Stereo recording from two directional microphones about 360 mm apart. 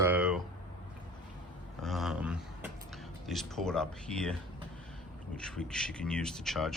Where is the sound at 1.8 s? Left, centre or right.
Centre.